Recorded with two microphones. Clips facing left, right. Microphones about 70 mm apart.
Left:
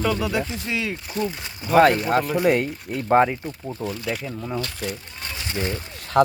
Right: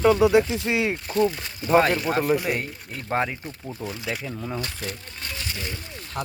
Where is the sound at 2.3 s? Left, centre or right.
Left.